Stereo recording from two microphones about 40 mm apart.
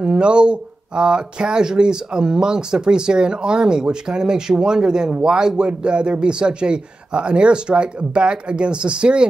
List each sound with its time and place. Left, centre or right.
0.0 s speech: right